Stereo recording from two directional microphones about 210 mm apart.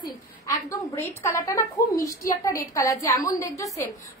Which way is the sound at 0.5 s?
15° left (ahead or behind).